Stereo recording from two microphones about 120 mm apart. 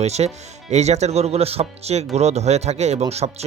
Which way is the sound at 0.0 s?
65° right (ahead or behind).